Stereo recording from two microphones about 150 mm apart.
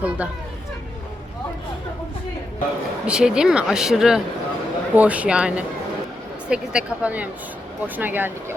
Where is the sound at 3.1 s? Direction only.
5° right (ahead or behind).